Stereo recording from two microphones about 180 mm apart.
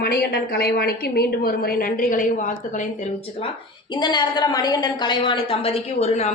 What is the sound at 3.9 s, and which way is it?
A woman's voice, 25° left (ahead or behind).